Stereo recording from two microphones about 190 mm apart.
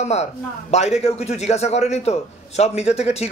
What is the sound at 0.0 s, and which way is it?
A man's voice, 35° left (ahead or behind).